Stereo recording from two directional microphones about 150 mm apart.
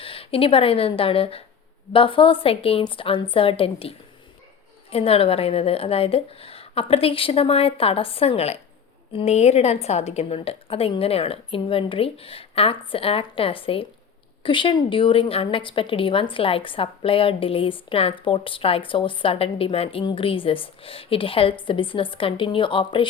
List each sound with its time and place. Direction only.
0.0 s a woman's voice: 40° left (ahead or behind)